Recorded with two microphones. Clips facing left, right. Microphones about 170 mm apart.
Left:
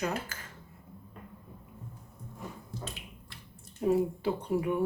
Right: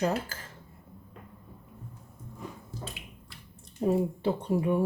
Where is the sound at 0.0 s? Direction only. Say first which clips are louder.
Right 5 dB; 35° right (ahead or behind).